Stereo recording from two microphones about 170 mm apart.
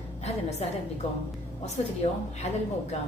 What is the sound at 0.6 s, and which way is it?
Speech, 40° left (ahead or behind).